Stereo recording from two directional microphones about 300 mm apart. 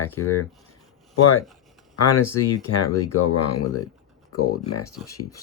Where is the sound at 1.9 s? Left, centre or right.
Left.